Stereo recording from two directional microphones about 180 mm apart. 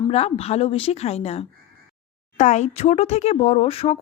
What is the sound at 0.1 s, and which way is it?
Speech, 35° left (ahead or behind).